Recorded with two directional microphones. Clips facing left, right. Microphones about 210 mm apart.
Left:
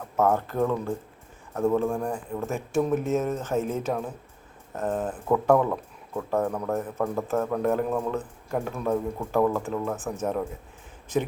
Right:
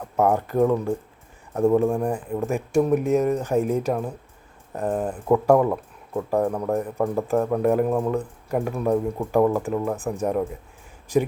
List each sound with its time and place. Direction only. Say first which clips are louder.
0.2 s speech: right 4 dB; 15° right (ahead or behind)